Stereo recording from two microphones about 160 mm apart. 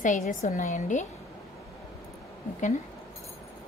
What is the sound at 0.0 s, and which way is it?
A woman's voice, 50° left (ahead or behind).